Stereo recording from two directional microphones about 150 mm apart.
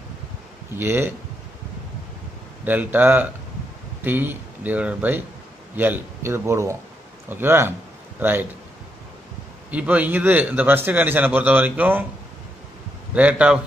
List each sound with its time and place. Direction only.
0.7 s a man's voice: 15° right (ahead or behind)
2.6 s a man's voice: 10° right (ahead or behind)
9.7 s a man's voice: 10° right (ahead or behind)
13.1 s a man's voice: 10° right (ahead or behind)